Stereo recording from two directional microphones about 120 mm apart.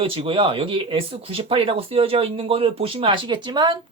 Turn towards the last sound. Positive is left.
turn(degrees=-40)  # may be behind; listen again after turning